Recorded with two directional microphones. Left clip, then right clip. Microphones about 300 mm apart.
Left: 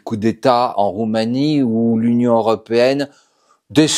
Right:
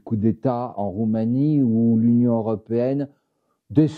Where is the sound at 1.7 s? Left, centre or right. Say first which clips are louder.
Left 4 dB; left.